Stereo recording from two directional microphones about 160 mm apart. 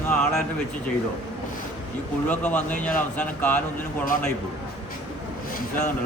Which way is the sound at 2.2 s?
10° left (ahead or behind).